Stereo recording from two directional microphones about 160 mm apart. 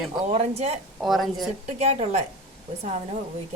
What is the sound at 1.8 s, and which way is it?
Speech, 40° right (ahead or behind).